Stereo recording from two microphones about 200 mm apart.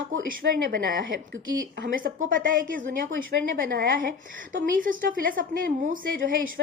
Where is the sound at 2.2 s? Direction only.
45° right (ahead or behind).